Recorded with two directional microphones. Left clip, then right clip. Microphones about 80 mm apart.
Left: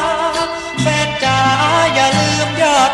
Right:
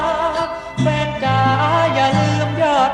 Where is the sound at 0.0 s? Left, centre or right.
Left.